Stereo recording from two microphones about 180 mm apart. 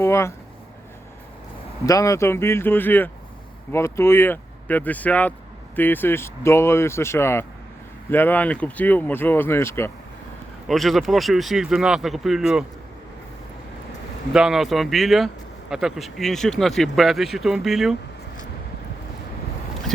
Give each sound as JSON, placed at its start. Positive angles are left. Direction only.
{"t": 0.0, "sound": "speech", "side_deg": 15}
{"t": 1.9, "sound": "speech", "side_deg": 20}
{"t": 10.7, "sound": "speech", "side_deg": 0}
{"t": 14.3, "sound": "speech", "side_deg": -5}